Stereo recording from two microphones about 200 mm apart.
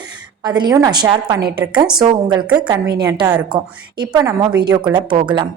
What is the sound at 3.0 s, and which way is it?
A woman's voice, 20° right (ahead or behind).